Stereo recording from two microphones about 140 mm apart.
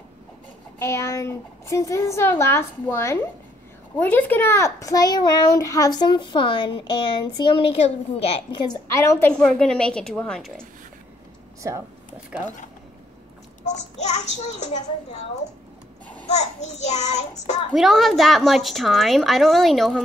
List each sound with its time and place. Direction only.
0.7 s a child's voice: 20° left (ahead or behind); by 8.5 s 45° left (ahead or behind)
8.6 s a child's voice: 20° left (ahead or behind)
9.3 s a woman's voice: 5° left (ahead or behind)
13.7 s a child's voice: 55° left (ahead or behind)
16.3 s child singing: 55° left (ahead or behind)
17.7 s a woman's voice: centre (ahead or behind)